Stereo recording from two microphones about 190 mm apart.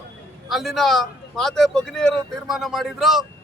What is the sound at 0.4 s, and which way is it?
A man's voice, centre (ahead or behind).